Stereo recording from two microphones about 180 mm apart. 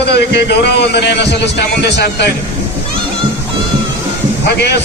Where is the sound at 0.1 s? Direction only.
65° left (ahead or behind).